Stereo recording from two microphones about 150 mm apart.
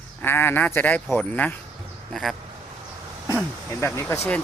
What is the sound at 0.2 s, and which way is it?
Speech, 15° left (ahead or behind).